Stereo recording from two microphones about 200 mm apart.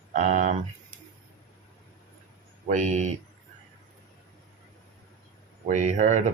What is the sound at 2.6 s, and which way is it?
Speech, 35° right (ahead or behind).